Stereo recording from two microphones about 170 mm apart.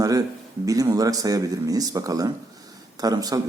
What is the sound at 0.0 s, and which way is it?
Speech, 20° right (ahead or behind).